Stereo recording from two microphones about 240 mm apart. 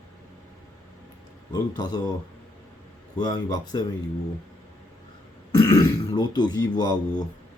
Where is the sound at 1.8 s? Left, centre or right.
Centre.